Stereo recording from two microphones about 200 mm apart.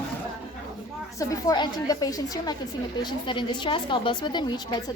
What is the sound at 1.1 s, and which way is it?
A woman's voice, 15° left (ahead or behind).